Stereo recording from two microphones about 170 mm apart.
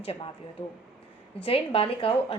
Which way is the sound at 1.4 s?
35° left (ahead or behind).